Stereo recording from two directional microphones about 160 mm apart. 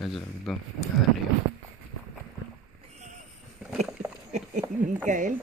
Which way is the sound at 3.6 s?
10° right (ahead or behind).